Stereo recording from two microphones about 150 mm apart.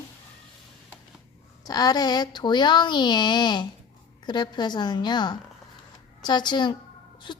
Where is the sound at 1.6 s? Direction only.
25° left (ahead or behind).